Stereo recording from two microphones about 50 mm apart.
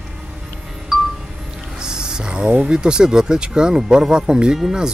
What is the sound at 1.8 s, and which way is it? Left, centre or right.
Music, centre.